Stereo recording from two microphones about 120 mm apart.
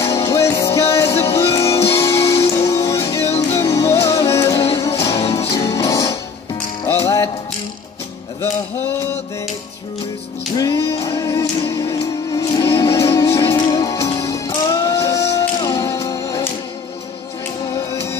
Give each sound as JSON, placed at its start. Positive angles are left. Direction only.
{"t": 0.3, "sound": "music", "side_deg": 25}
{"t": 10.6, "sound": "music", "side_deg": 25}